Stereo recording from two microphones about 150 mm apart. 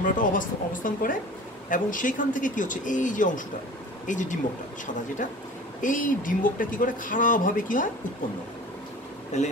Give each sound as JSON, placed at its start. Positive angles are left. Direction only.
{"t": 0.0, "sound": "speech", "side_deg": 60}
{"t": 5.8, "sound": "speech", "side_deg": 60}
{"t": 9.3, "sound": "speech", "side_deg": 50}